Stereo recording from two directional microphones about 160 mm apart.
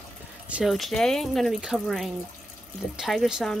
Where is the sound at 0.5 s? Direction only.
5° right (ahead or behind).